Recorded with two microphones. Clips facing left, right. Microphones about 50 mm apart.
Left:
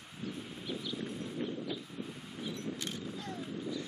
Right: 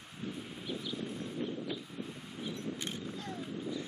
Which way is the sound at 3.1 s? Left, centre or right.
Centre.